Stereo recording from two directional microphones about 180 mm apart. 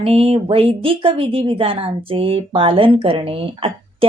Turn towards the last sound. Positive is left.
turn(degrees=-30)  # may be behind; listen again after turning